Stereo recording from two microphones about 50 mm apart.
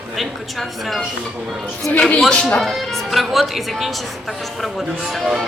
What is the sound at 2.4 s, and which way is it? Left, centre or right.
Speech, centre.